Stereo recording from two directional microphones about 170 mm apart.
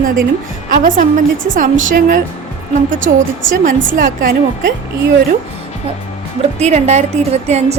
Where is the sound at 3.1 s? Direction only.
65° right (ahead or behind).